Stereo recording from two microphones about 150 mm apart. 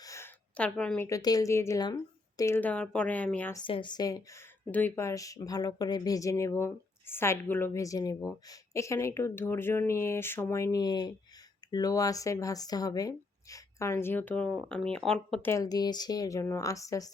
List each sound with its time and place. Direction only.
0.0 s a sound: 20° left (ahead or behind)
0.5 s speech: 5° left (ahead or behind)
1.0 s speech: 25° left (ahead or behind)
3.5 s speech: 30° left (ahead or behind)
4.7 s speech: 10° left (ahead or behind)